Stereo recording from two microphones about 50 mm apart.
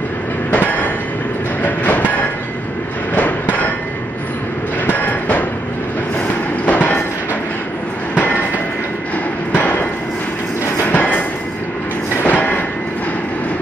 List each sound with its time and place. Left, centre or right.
0.5 s train: left
3.2 s hammer: left
4.8 s train: left
6.6 s train: left
9.6 s a sound: left
10.9 s a sound: left
12.2 s train: left